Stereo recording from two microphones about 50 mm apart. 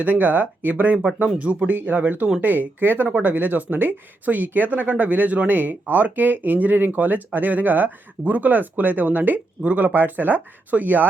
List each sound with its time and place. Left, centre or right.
0.0 s speech: right